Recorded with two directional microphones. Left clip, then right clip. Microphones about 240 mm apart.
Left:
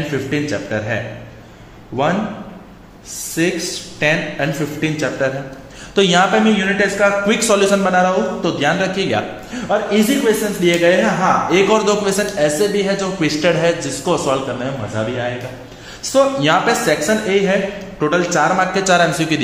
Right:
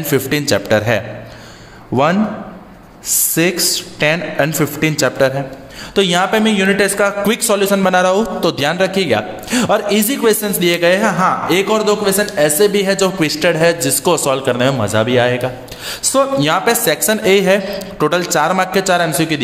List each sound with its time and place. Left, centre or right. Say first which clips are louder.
0.1 s a man's voice: right 9 dB; right
3.4 s a man's voice: right 3 dB; right
5.9 s a man's voice: left 1 dB; right
6.3 s a man's voice: right 2 dB; right
7.3 s speech: left 1 dB; right
8.7 s a man's voice: right 3 dB; right
9.5 s a man's voice: right 4 dB; right
11.7 s a man's voice: right 1 dB; centre
13.7 s a man's voice: right 4 dB; right
16.1 s speech: even; right